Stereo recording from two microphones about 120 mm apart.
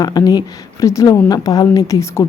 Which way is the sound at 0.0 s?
35° left (ahead or behind).